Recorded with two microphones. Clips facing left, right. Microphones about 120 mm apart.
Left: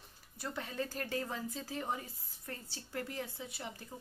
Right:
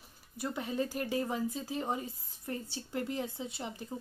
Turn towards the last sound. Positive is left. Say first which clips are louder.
# right 5 dB
turn(degrees=-25)  # may be behind; listen again after turning